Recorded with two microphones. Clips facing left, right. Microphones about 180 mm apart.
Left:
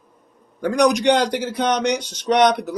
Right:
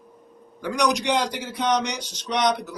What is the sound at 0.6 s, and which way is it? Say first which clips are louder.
Speech: left 6 dB; 50° left (ahead or behind).